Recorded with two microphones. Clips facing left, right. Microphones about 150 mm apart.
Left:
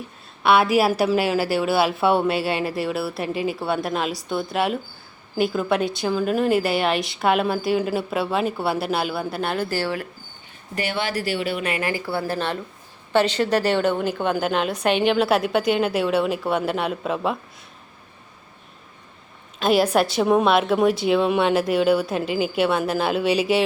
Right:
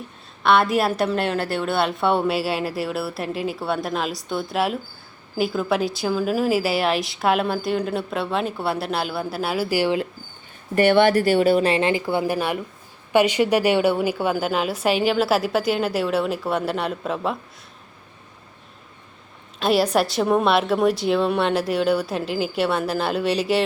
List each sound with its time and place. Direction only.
0.4 s a woman's voice: 5° left (ahead or behind); by 10.1 s 15° right (ahead or behind)
10.8 s a woman's voice: 55° right (ahead or behind); by 17.3 s centre (ahead or behind)
19.5 s a woman's voice: centre (ahead or behind)